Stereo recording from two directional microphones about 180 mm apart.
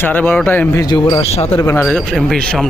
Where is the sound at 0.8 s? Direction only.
25° left (ahead or behind).